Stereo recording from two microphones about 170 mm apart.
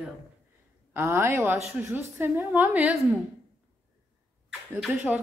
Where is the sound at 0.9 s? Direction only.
15° right (ahead or behind).